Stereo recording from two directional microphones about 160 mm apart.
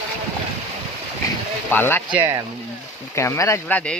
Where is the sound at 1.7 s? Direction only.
10° left (ahead or behind).